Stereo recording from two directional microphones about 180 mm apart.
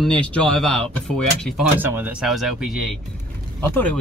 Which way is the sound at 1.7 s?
10° right (ahead or behind).